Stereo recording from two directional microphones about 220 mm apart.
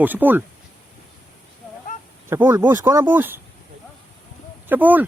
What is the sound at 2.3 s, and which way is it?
Speech, 10° right (ahead or behind).